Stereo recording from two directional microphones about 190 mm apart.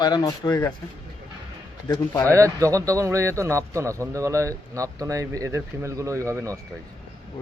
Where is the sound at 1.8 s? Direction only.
15° left (ahead or behind).